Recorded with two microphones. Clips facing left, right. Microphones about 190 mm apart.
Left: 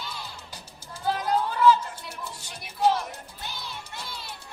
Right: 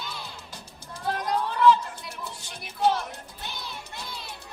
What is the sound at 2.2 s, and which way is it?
Music, 5° left (ahead or behind).